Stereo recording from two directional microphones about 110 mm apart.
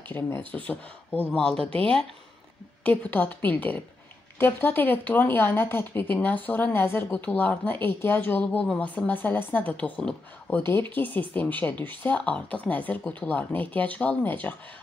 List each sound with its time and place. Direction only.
0.2 s speech: 15° left (ahead or behind)